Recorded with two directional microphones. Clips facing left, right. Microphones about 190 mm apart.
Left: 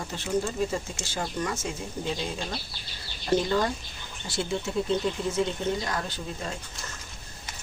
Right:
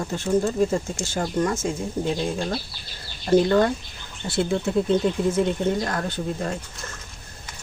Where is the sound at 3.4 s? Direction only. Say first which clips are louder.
Right 7 dB; 60° right (ahead or behind).